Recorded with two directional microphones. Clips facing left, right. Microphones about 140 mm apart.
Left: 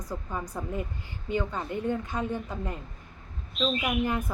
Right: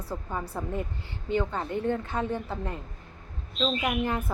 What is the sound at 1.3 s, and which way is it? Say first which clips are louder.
Speech: right 2 dB; 15° left (ahead or behind).